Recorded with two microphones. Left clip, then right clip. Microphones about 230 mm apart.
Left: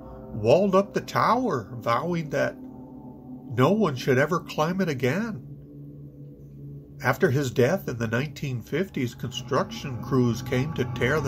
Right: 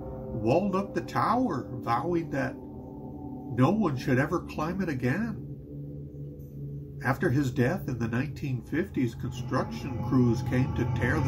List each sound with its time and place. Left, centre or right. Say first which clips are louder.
0.4 s speech: left 7 dB; left
3.5 s speech: left 5 dB; left
7.0 s speech: left 5 dB; left